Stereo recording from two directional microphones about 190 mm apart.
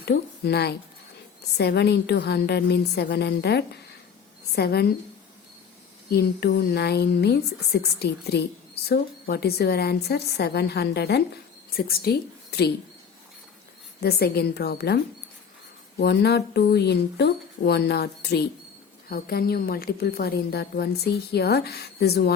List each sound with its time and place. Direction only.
0.0 s a woman's voice: 60° left (ahead or behind)
6.1 s speech: 55° left (ahead or behind)
14.0 s speech: 55° left (ahead or behind)